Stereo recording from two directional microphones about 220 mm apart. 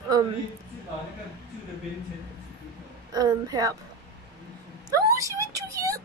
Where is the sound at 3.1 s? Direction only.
15° right (ahead or behind).